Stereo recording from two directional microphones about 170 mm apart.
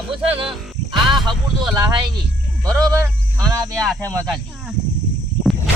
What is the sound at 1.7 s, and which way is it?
Speech, 25° right (ahead or behind).